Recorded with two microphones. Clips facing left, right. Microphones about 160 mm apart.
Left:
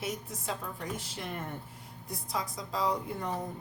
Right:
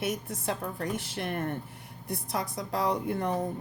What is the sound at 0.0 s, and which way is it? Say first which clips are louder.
A woman's voice: right 5 dB; 70° right (ahead or behind).